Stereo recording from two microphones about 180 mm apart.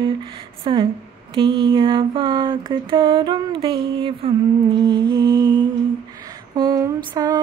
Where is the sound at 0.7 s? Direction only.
25° right (ahead or behind).